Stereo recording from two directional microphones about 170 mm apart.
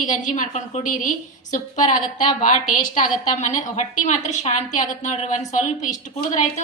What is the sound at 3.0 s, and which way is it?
A woman's voice, 45° left (ahead or behind).